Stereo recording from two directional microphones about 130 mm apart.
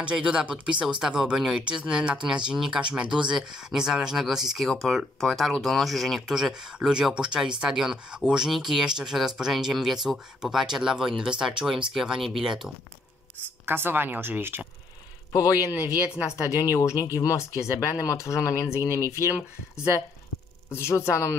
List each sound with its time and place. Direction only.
0.0 s speech: 5° right (ahead or behind)
13.7 s speech: 15° right (ahead or behind)
15.3 s speech: 25° left (ahead or behind)
16.3 s speech: 15° right (ahead or behind)
16.7 s speech: 25° left (ahead or behind)
18.6 s speech: 20° right (ahead or behind)
20.7 s speech: 20° left (ahead or behind)